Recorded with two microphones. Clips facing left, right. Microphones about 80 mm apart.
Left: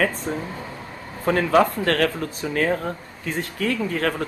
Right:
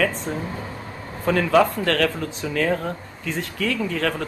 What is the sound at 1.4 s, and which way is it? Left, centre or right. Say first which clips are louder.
Speech: even; centre.